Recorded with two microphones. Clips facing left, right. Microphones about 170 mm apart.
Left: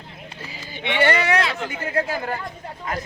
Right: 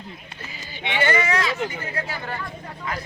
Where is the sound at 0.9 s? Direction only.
65° left (ahead or behind).